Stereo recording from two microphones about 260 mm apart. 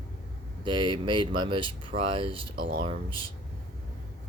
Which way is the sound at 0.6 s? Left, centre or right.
Centre.